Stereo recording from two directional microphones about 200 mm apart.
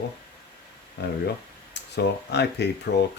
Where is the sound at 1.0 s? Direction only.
55° left (ahead or behind).